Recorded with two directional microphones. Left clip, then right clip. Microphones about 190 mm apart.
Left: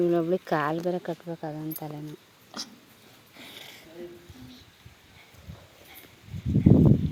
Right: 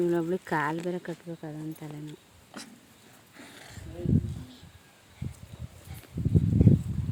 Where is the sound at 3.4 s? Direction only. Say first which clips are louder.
Left 4 dB; 15° left (ahead or behind).